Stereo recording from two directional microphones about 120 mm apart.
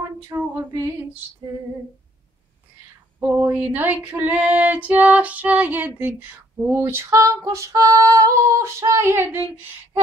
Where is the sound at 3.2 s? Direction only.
15° right (ahead or behind).